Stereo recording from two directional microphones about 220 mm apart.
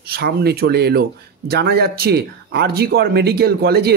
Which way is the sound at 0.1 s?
45° right (ahead or behind).